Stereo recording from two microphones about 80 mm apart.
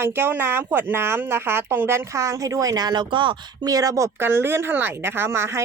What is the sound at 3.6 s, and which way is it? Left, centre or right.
Speech, right.